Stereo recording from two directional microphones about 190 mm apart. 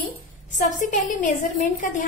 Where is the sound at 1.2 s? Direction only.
45° left (ahead or behind).